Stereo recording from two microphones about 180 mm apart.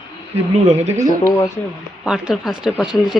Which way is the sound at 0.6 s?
35° right (ahead or behind).